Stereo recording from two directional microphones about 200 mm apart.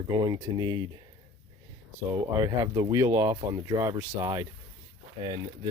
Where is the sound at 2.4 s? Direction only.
20° right (ahead or behind).